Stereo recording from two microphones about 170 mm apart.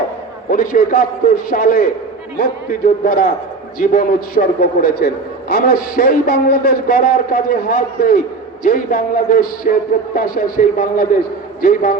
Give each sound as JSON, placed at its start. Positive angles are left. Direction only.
{"t": 0.5, "sound": "a man's voice", "side_deg": 60}